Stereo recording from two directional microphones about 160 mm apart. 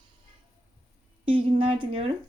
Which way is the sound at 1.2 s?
35° right (ahead or behind).